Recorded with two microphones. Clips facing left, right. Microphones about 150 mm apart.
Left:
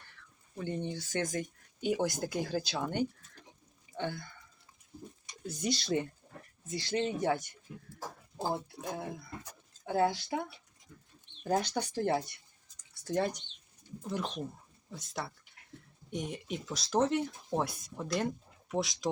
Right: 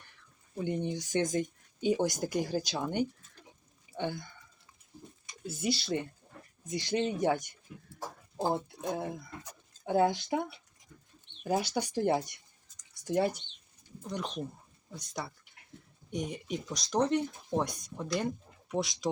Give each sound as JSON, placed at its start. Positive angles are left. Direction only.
{"t": 0.5, "sound": "speech", "side_deg": -15}
{"t": 5.5, "sound": "speech", "side_deg": -5}
{"t": 6.7, "sound": "speech", "side_deg": -15}
{"t": 11.4, "sound": "speech", "side_deg": -10}
{"t": 12.9, "sound": "a sound", "side_deg": -10}
{"t": 14.9, "sound": "speech", "side_deg": 0}